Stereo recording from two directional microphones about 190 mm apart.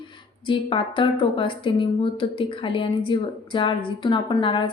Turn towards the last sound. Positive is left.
turn(degrees=25)  # may be behind; listen again after turning